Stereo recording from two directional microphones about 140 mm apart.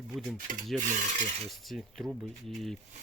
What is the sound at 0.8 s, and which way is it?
Filing, 60° right (ahead or behind).